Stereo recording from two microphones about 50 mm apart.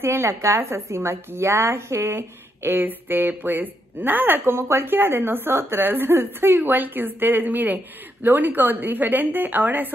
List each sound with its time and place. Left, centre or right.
0.0 s a woman's voice: right